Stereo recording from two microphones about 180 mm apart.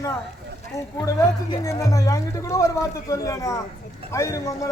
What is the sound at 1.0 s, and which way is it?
A man's voice, 20° left (ahead or behind).